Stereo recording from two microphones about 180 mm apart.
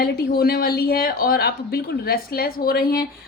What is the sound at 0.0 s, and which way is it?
A woman's voice, 60° left (ahead or behind).